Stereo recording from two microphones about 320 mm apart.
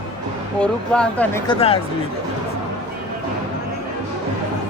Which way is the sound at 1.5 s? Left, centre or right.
Centre.